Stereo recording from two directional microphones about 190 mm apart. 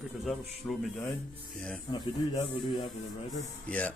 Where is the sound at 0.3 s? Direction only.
Centre (ahead or behind).